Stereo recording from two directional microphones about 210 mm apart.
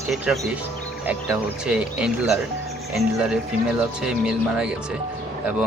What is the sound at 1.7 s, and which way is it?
Speech, 5° right (ahead or behind).